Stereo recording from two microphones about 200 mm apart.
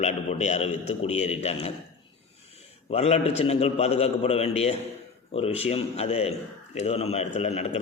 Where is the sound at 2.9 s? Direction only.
30° left (ahead or behind).